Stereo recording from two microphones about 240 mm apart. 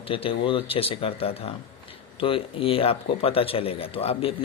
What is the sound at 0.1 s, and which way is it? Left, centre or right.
Speech, left.